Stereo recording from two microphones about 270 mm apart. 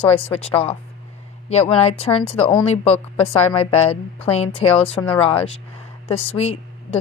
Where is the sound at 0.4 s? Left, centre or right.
Left.